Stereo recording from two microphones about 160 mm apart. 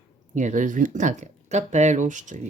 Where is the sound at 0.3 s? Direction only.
50° right (ahead or behind).